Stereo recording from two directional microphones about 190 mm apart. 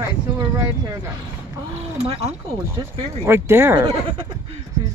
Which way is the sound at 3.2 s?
15° right (ahead or behind).